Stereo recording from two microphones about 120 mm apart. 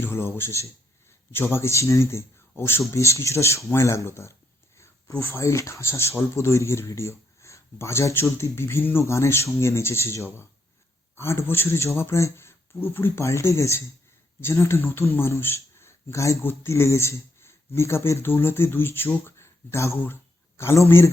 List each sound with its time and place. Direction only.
0.0 s speech: 20° left (ahead or behind)